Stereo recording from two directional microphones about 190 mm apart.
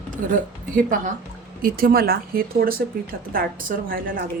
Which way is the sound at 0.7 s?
45° right (ahead or behind).